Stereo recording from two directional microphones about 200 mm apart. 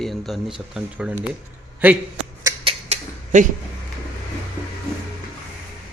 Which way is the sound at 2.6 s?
30° right (ahead or behind).